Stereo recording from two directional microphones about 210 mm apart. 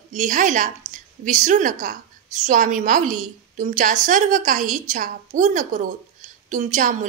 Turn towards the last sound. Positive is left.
turn(degrees=-35)  # may be behind; listen again after turning